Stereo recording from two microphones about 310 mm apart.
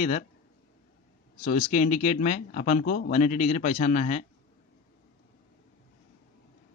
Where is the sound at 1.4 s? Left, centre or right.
Left.